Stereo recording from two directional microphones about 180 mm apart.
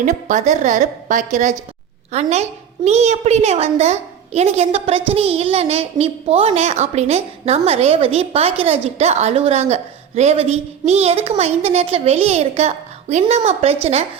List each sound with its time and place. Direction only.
0.0 s a woman's voice: 45° right (ahead or behind)